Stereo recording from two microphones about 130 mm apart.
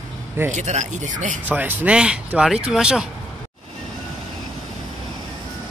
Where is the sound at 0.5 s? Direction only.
65° right (ahead or behind).